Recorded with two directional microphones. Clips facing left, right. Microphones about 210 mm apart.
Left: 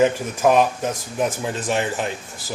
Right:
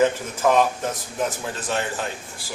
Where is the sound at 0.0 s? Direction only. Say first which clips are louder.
Left 2 dB; 15° left (ahead or behind).